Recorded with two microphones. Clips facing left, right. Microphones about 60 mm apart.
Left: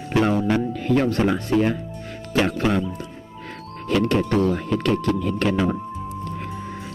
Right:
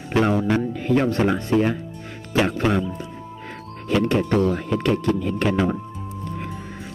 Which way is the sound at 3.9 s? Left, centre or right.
Right.